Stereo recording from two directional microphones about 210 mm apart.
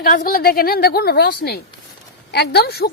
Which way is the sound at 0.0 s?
40° left (ahead or behind).